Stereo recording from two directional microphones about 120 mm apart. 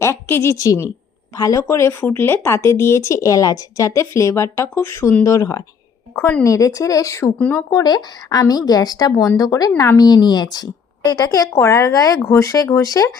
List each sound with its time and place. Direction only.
0.0 s speech: 20° left (ahead or behind)
6.1 s speech: 15° left (ahead or behind)
6.4 s speech: 25° left (ahead or behind)
7.3 s speech: 10° left (ahead or behind)
7.7 s speech: 30° left (ahead or behind)